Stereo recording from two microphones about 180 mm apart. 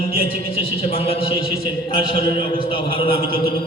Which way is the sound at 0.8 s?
30° left (ahead or behind).